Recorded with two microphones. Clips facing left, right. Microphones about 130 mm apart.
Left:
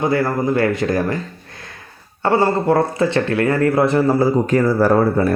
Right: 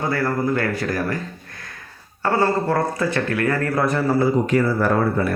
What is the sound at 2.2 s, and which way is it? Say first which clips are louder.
Speech: left 4 dB; 20° left (ahead or behind).